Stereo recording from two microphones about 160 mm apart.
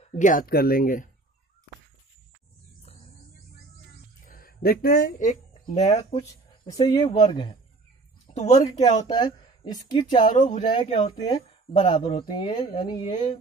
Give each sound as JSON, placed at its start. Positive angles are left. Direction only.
{"t": 0.0, "sound": "speech", "side_deg": 50}
{"t": 4.2, "sound": "speech", "side_deg": 65}
{"t": 6.1, "sound": "speech", "side_deg": 25}
{"t": 8.3, "sound": "speech", "side_deg": 40}
{"t": 9.0, "sound": "speech", "side_deg": 25}
{"t": 10.2, "sound": "speech", "side_deg": 50}